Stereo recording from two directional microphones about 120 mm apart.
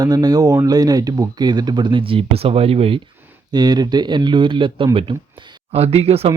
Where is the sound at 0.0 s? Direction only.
35° right (ahead or behind); by 3.0 s 55° right (ahead or behind).